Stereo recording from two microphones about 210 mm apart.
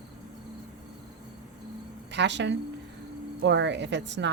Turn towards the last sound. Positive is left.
turn(degrees=-55)  # may be behind; listen again after turning